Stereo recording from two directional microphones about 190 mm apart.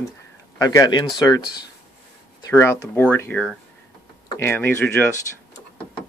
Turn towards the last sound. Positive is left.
turn(degrees=15)  # may be behind; listen again after turning